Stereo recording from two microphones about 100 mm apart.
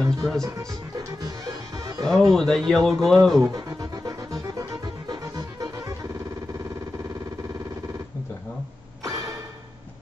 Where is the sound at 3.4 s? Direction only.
35° right (ahead or behind).